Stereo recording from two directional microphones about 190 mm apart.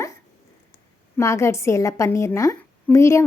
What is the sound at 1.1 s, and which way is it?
A woman's voice, 15° left (ahead or behind).